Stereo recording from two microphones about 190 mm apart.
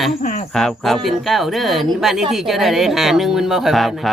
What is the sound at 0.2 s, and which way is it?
Cricket, 40° left (ahead or behind).